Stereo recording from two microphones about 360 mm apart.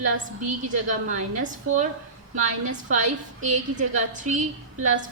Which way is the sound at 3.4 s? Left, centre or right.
Centre.